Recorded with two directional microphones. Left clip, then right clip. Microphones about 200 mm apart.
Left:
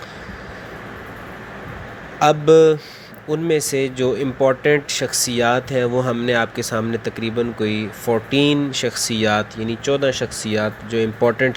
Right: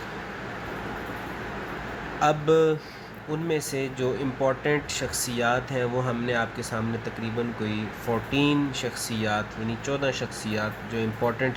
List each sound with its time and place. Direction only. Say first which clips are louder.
2.1 s speech: left 9 dB; 35° left (ahead or behind)